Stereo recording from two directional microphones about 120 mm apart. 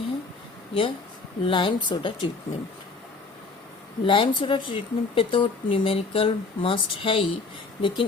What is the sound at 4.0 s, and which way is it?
A woman's voice, 45° left (ahead or behind).